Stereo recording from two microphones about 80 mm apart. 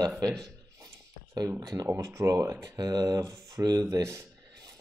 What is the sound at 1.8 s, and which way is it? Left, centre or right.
Speech, right.